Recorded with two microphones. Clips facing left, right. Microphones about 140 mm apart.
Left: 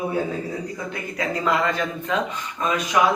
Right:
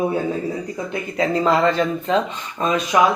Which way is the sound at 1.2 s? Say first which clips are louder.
Right 5 dB; 30° right (ahead or behind).